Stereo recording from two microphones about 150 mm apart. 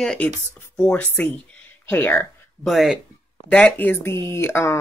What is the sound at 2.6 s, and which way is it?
Speech, centre (ahead or behind).